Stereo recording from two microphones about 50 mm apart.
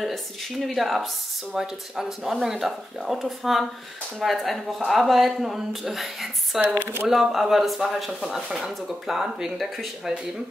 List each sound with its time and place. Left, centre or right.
0.0 s speech: centre
6.8 s speech: right
7.1 s speech: centre